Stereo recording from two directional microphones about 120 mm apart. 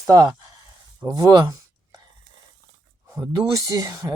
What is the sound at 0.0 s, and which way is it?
Speech, 30° right (ahead or behind).